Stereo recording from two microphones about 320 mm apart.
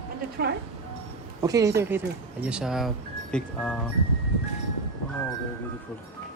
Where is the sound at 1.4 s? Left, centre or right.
Centre.